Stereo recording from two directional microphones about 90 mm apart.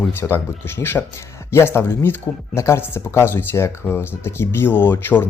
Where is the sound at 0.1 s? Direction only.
25° left (ahead or behind).